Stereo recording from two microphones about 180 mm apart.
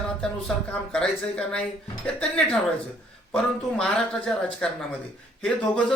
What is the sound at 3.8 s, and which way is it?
Speech, 5° left (ahead or behind).